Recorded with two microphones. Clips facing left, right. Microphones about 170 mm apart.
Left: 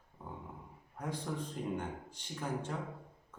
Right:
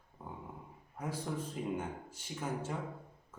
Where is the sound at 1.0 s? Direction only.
5° right (ahead or behind).